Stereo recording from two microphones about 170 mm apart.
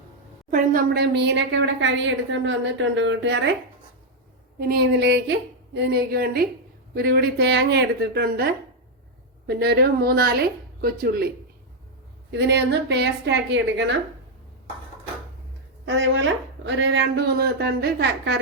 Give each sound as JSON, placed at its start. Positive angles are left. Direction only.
{"t": 0.5, "sound": "a woman's voice", "side_deg": -60}
{"t": 4.7, "sound": "a woman's voice", "side_deg": -75}
{"t": 9.5, "sound": "a woman's voice", "side_deg": -70}
{"t": 12.3, "sound": "a woman's voice", "side_deg": -85}
{"t": 15.9, "sound": "a woman's voice", "side_deg": -90}